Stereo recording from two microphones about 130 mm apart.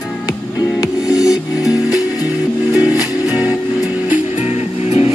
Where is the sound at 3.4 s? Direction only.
10° right (ahead or behind).